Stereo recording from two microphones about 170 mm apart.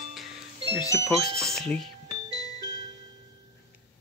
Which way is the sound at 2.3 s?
20° right (ahead or behind).